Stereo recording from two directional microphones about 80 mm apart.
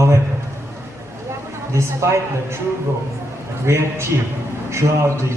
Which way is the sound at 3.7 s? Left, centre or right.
Right.